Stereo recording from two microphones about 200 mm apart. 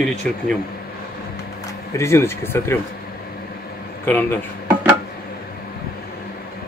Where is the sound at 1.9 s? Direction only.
15° left (ahead or behind).